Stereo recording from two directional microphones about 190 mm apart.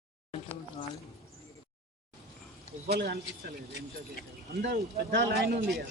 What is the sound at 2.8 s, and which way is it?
Speech, 55° right (ahead or behind).